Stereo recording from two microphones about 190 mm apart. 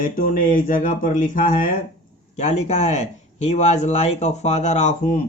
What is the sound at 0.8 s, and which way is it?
Speech, 45° left (ahead or behind).